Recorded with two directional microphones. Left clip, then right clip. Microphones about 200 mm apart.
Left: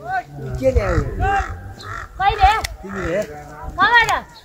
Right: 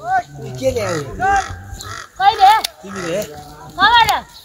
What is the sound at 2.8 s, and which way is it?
Speech, 25° right (ahead or behind).